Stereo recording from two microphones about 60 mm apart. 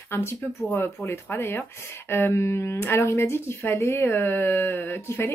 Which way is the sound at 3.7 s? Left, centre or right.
Left.